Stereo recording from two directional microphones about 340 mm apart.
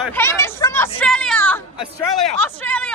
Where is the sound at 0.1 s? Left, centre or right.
Centre.